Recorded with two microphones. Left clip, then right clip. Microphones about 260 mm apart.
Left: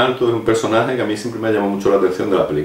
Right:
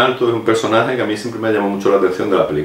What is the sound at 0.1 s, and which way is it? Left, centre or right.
Speech, right.